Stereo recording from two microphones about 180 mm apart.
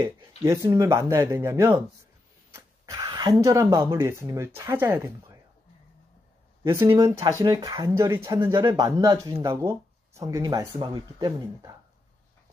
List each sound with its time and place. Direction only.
0.4 s speech: 15° right (ahead or behind)
6.7 s speech: 15° right (ahead or behind)